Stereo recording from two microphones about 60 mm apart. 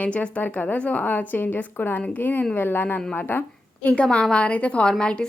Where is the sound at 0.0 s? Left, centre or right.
Left.